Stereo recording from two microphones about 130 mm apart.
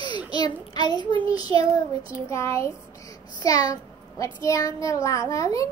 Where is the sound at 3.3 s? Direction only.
25° left (ahead or behind).